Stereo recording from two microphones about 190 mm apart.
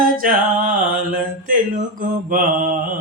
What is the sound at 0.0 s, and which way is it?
Music, 45° right (ahead or behind).